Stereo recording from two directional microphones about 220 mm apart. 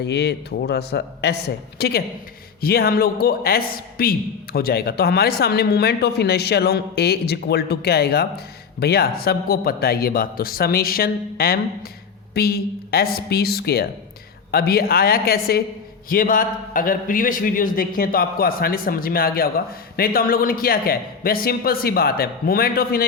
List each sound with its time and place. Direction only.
0.0 s a man's voice: 50° left (ahead or behind)